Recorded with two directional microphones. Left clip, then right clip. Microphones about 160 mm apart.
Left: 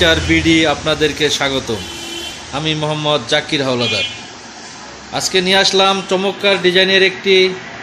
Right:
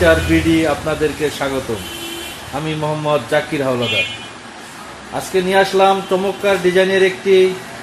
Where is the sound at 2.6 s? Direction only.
20° left (ahead or behind).